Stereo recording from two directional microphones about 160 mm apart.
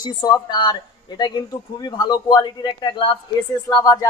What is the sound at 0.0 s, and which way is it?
Speech, 25° left (ahead or behind).